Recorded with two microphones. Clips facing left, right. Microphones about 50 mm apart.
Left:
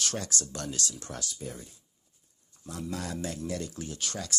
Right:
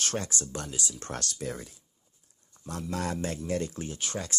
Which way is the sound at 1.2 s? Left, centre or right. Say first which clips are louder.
Right 4 dB; right.